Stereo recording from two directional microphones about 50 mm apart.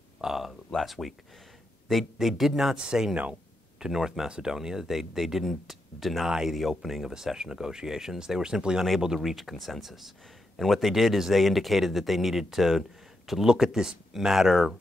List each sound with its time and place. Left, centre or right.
0.2 s a sound: centre
0.5 s speech: centre
2.1 s speech: centre